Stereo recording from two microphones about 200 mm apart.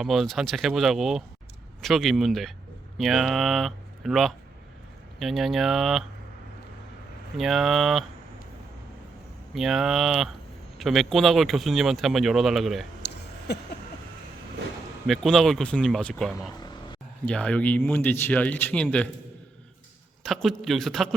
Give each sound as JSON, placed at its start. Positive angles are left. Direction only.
{"t": 0.0, "sound": "speech", "side_deg": 0}
{"t": 7.3, "sound": "speech", "side_deg": 0}
{"t": 9.6, "sound": "speech", "side_deg": 0}
{"t": 13.5, "sound": "a sound", "side_deg": 55}
{"t": 15.0, "sound": "speech", "side_deg": 0}
{"t": 20.2, "sound": "speech", "side_deg": 0}